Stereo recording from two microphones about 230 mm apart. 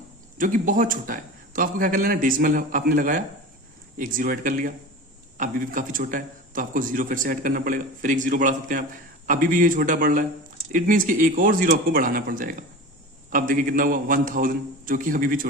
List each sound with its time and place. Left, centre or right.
0.3 s a man's voice: right